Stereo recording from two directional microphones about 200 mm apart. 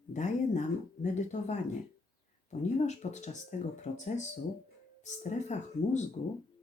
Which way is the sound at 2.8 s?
35° left (ahead or behind).